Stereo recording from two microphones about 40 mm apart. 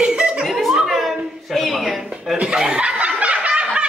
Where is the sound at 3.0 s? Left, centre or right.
Right.